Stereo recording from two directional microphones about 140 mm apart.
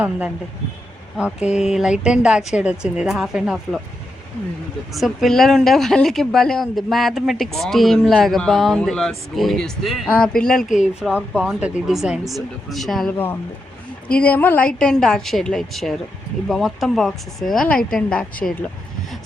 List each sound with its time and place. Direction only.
1.1 s a woman's voice: 5° right (ahead or behind)
4.9 s a woman's voice: centre (ahead or behind)
13.1 s a woman's voice: 15° left (ahead or behind)